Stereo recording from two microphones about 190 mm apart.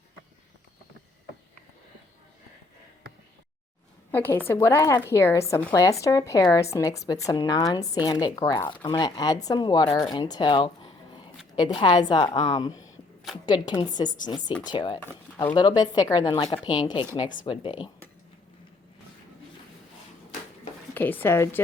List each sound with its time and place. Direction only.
4.1 s speech: 10° left (ahead or behind)
20.9 s speech: 10° left (ahead or behind)